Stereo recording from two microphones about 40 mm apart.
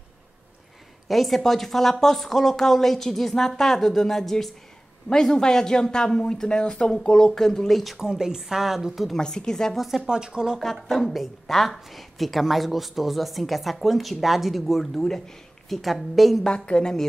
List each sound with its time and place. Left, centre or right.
1.0 s speech: centre
5.1 s speech: centre
8.0 s a woman's voice: centre
9.1 s speech: centre
9.8 s a woman's voice: centre
10.0 s speech: centre
10.6 s a woman's voice: centre
16.4 s a woman's voice: left